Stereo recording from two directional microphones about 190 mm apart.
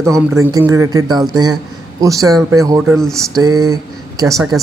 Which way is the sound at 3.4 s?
20° right (ahead or behind).